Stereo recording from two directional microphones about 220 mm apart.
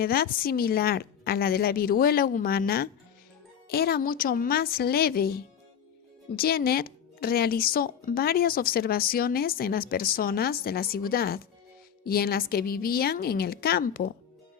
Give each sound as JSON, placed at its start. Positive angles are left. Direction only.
{"t": 0.0, "sound": "speech", "side_deg": 45}